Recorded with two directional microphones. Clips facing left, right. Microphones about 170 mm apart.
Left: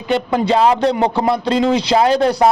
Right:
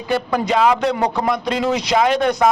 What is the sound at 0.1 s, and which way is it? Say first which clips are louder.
Speech: left 3 dB; 25° left (ahead or behind).